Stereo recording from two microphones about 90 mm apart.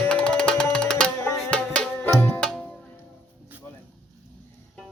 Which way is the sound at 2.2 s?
20° left (ahead or behind).